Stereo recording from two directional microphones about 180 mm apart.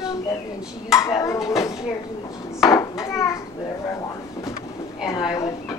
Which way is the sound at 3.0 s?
15° left (ahead or behind).